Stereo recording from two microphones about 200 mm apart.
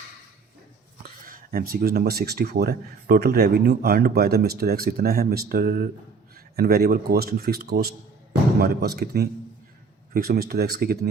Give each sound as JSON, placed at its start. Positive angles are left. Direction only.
{"t": 1.0, "sound": "speech", "side_deg": -45}